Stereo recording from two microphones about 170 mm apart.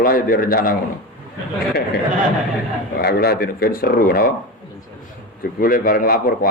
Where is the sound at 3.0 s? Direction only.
65° left (ahead or behind).